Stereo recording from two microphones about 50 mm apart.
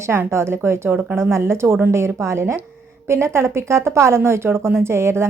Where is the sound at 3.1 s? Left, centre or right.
Right.